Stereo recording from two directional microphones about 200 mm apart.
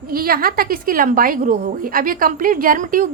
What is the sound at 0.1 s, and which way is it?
A woman's voice, 50° right (ahead or behind).